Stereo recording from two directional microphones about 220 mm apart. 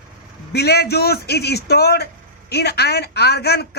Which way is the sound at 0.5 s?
45° left (ahead or behind).